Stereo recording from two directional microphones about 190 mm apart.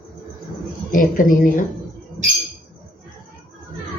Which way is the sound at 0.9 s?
45° left (ahead or behind).